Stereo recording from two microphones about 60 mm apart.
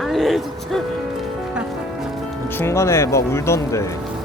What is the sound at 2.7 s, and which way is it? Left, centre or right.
Speech, left.